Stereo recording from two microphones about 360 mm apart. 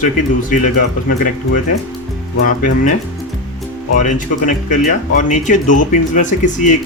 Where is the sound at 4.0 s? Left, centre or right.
Left.